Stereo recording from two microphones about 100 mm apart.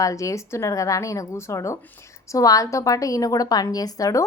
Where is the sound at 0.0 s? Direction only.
35° left (ahead or behind).